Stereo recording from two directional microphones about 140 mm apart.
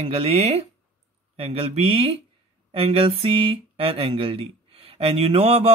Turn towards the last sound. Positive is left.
turn(degrees=-45)  # may be behind; listen again after turning